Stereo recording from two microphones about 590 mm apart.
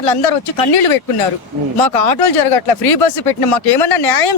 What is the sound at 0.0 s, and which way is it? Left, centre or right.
Speech, left.